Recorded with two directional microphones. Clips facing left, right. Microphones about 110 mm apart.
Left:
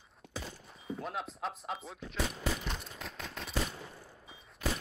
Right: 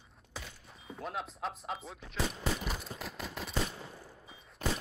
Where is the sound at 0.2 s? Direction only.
75° left (ahead or behind).